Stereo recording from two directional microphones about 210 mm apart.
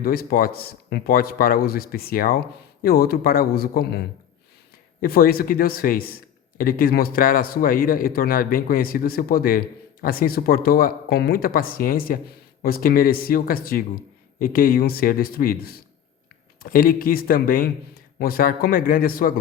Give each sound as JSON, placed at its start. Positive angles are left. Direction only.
{"t": 0.0, "sound": "a man's voice", "side_deg": 45}